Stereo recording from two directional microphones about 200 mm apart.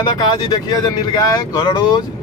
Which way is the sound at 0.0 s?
20° left (ahead or behind).